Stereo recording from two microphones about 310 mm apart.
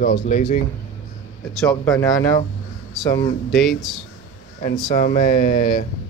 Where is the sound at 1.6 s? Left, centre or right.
Centre.